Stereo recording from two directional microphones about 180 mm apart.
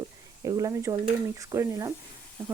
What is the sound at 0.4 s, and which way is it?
Speech, 20° right (ahead or behind).